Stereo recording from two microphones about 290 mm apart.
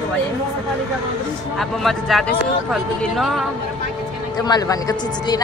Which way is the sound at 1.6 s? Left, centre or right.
Centre.